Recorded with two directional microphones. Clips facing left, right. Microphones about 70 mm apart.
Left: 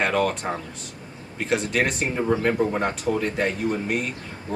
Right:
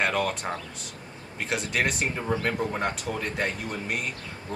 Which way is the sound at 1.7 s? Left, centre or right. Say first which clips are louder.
Left 3 dB; centre.